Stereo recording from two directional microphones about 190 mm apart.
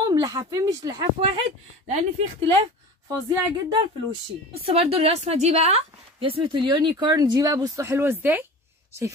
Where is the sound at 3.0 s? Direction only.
25° right (ahead or behind).